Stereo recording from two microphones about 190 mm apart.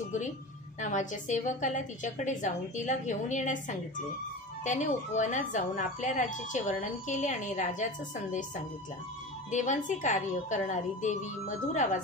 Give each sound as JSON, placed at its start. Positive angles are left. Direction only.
{"t": 0.7, "sound": "a woman's voice", "side_deg": 40}
{"t": 9.5, "sound": "a woman's voice", "side_deg": 40}